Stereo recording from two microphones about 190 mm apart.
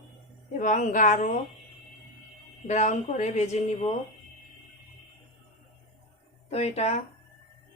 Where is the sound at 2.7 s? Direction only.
40° left (ahead or behind).